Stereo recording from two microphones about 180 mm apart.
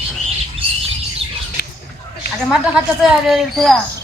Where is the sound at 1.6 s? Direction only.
55° left (ahead or behind).